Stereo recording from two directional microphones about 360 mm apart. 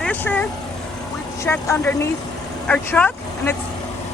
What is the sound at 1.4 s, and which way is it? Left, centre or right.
Speech, centre.